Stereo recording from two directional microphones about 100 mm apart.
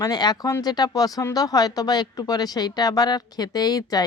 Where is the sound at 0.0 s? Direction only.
40° left (ahead or behind).